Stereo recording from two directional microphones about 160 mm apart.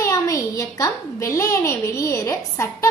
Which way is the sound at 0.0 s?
20° left (ahead or behind).